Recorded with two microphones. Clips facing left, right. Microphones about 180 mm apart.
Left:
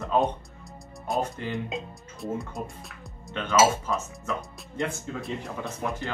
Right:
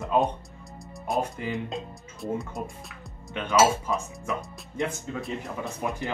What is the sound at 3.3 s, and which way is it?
Speech, 15° right (ahead or behind).